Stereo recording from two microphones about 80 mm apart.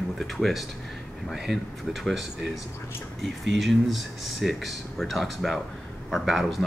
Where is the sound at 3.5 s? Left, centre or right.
Centre.